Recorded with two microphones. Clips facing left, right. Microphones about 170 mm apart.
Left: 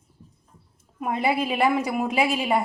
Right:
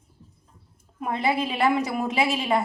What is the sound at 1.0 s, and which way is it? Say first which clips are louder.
A woman's voice: left 1 dB; 10° left (ahead or behind).